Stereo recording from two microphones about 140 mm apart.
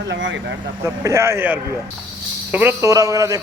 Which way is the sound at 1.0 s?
20° right (ahead or behind).